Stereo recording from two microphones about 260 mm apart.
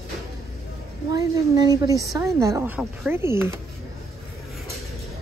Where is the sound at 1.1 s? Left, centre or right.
Centre.